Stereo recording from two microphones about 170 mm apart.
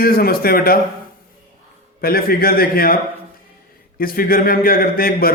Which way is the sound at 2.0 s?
60° left (ahead or behind).